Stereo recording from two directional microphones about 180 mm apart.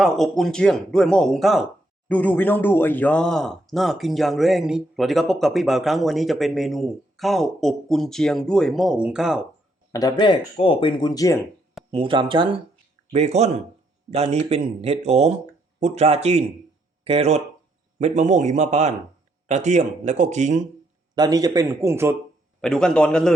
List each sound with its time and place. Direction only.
0.0 s speech: centre (ahead or behind)
9.9 s speech: 20° left (ahead or behind)
11.9 s speech: 30° right (ahead or behind)
21.2 s speech: 20° right (ahead or behind)
22.6 s speech: 5° left (ahead or behind)